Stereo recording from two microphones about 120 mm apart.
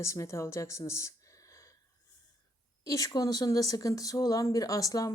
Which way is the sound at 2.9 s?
30° left (ahead or behind).